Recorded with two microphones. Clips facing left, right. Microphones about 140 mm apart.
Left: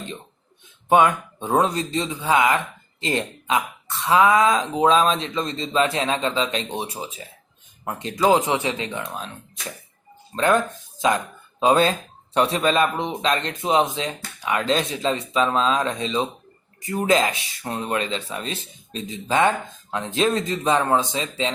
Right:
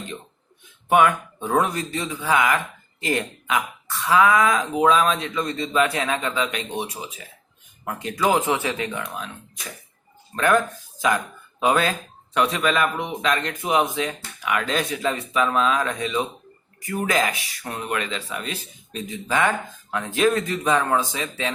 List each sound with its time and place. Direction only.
0.9 s speech: 25° left (ahead or behind)
10.3 s speech: 25° left (ahead or behind)
11.6 s speech: 25° left (ahead or behind)